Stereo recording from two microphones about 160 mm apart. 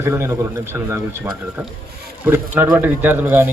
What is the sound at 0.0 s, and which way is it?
Speech, 15° right (ahead or behind).